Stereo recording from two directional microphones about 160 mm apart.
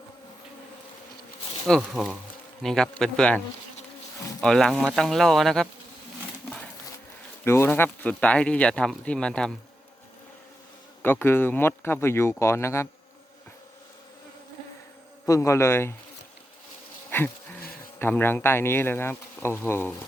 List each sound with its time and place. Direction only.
1.6 s speech: centre (ahead or behind)
7.4 s speech: 15° left (ahead or behind)
11.0 s speech: 15° left (ahead or behind)
15.3 s speech: 20° left (ahead or behind)
17.1 s insect: 15° left (ahead or behind)
18.0 s speech: 15° left (ahead or behind)